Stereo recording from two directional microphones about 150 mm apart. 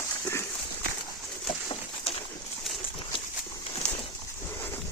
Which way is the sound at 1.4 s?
35° left (ahead or behind).